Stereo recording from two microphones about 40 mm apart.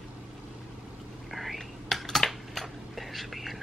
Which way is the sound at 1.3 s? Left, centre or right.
Centre.